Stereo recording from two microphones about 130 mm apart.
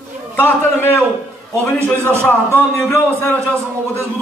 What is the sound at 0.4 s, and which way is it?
A man's voice, 15° left (ahead or behind).